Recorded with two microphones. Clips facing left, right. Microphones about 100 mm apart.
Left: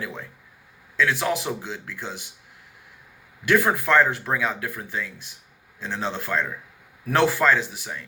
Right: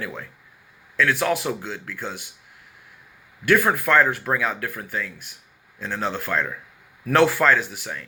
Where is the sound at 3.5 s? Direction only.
25° left (ahead or behind).